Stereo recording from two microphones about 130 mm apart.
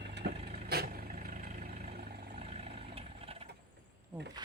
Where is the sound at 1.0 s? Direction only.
65° right (ahead or behind).